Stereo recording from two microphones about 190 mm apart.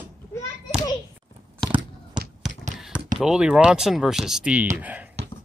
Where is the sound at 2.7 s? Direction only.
5° right (ahead or behind).